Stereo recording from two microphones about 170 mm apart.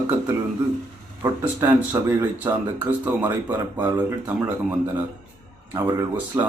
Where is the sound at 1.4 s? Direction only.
10° right (ahead or behind).